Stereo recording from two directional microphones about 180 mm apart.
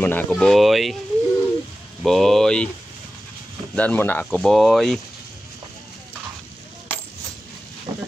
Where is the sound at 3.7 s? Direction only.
10° left (ahead or behind).